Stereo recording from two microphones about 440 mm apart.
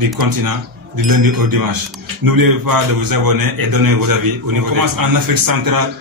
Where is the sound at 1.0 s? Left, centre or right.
Right.